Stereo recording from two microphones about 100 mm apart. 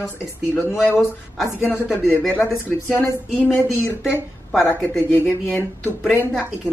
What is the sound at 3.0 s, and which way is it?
Speech, 25° left (ahead or behind).